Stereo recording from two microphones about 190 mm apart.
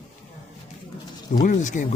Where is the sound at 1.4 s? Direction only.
40° left (ahead or behind).